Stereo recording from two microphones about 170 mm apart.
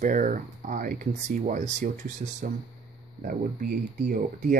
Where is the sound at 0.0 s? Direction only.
50° right (ahead or behind).